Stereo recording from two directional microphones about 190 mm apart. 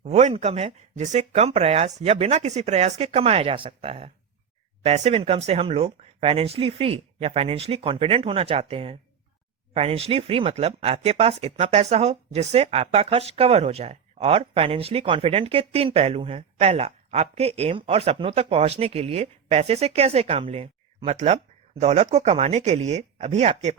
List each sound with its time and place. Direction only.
0.0 s speech: 35° right (ahead or behind)